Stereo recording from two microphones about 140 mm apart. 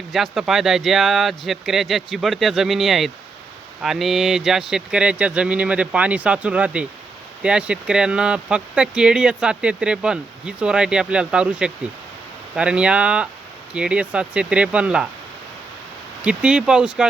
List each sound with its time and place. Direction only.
0.1 s speech: centre (ahead or behind)
16.2 s speech: 5° right (ahead or behind)